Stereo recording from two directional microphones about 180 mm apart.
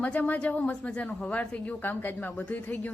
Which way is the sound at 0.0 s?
10° left (ahead or behind).